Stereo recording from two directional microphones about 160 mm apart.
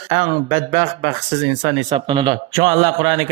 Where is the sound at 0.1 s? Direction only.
35° right (ahead or behind).